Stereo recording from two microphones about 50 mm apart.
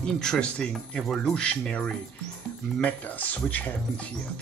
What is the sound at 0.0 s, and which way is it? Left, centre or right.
Speech, centre.